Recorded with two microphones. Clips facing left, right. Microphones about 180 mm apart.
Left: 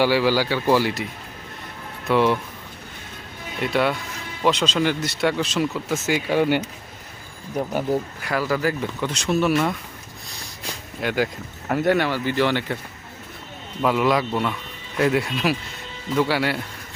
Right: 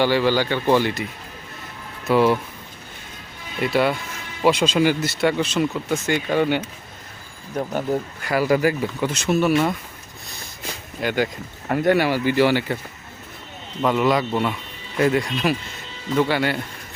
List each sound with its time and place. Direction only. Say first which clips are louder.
0.0 s speech: even; 5° left (ahead or behind)
2.0 s speech: right 2 dB; 5° right (ahead or behind)
3.6 s speech: right 2 dB; centre (ahead or behind)
8.4 s speech: right 4 dB; 15° right (ahead or behind)
10.2 s snort: right 1 dB; centre (ahead or behind)
11.7 s speech: right 1 dB; centre (ahead or behind)
12.0 s speech: right 3 dB; 10° right (ahead or behind)
13.8 s speech: right 1 dB; centre (ahead or behind)